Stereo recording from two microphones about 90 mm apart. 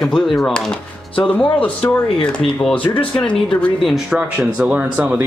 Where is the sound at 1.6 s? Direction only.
15° left (ahead or behind).